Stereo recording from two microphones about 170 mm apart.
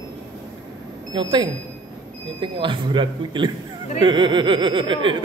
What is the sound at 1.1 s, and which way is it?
Speech, 30° right (ahead or behind).